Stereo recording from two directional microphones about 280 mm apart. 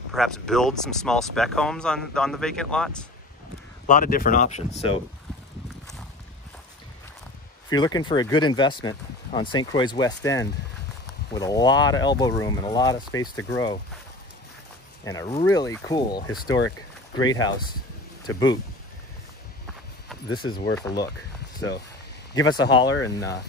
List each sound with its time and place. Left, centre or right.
0.1 s speech: centre
3.8 s speech: left
7.7 s speech: centre
15.0 s speech: centre
20.2 s speech: centre
20.5 s speech: left
22.5 s speech: centre